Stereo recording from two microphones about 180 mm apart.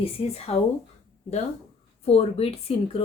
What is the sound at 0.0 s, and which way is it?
Speech, 35° left (ahead or behind).